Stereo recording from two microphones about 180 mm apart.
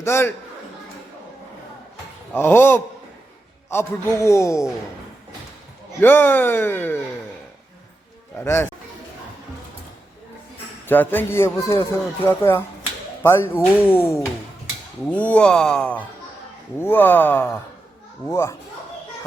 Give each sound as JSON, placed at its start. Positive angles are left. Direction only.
{"t": 0.0, "sound": "a man's voice", "side_deg": 15}
{"t": 2.3, "sound": "a man's voice", "side_deg": 10}
{"t": 6.0, "sound": "a man's voice", "side_deg": 10}
{"t": 8.4, "sound": "a man's voice", "side_deg": 15}
{"t": 10.8, "sound": "a man's voice", "side_deg": 10}